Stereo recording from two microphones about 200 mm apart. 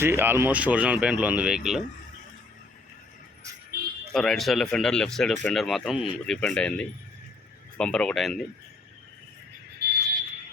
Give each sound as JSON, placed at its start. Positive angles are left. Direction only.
{"t": 0.0, "sound": "speech", "side_deg": -10}
{"t": 4.1, "sound": "speech", "side_deg": 0}
{"t": 9.8, "sound": "fire alarm", "side_deg": -55}